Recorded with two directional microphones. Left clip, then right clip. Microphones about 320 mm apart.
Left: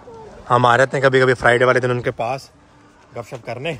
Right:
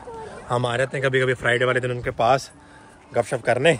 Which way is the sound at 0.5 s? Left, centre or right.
Left.